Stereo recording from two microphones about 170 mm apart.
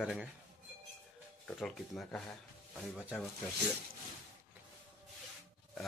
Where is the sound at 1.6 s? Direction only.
Centre (ahead or behind).